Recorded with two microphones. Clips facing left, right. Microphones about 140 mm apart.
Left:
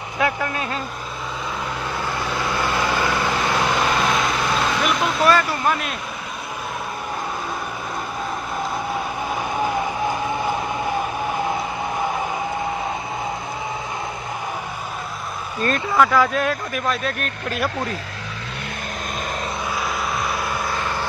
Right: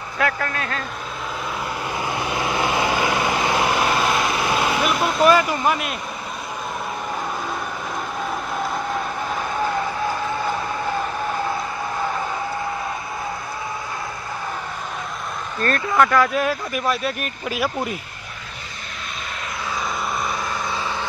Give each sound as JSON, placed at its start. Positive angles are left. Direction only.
{"t": 0.2, "sound": "speech", "side_deg": 15}
{"t": 1.9, "sound": "vehicle", "side_deg": -10}
{"t": 9.3, "sound": "vehicle", "side_deg": 15}
{"t": 16.0, "sound": "speech", "side_deg": 5}
{"t": 20.2, "sound": "vehicle", "side_deg": 0}